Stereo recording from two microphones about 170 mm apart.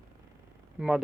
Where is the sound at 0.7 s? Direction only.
5° right (ahead or behind).